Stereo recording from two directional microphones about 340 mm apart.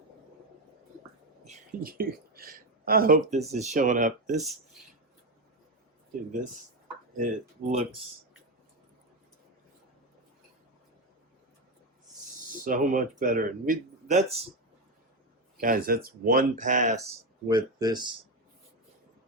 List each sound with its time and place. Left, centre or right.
1.5 s speech: right
7.2 s speech: right
12.5 s speech: right
15.6 s speech: right